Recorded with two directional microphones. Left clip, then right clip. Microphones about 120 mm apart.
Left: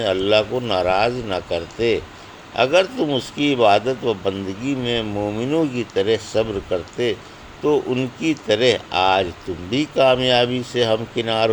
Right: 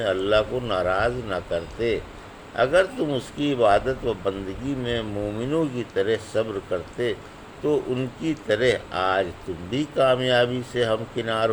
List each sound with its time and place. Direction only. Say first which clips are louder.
0.0 s speech: left 4 dB; 25° left (ahead or behind)